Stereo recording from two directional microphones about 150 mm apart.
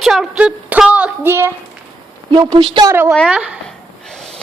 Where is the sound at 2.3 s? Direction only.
30° right (ahead or behind).